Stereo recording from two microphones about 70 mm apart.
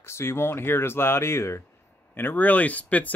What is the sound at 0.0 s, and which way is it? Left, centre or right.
Speech, left.